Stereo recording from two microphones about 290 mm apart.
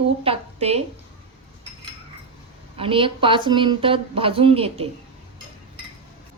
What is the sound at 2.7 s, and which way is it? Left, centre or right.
Speech, centre.